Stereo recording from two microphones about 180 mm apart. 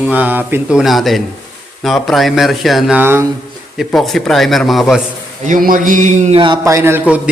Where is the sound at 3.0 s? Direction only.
10° right (ahead or behind).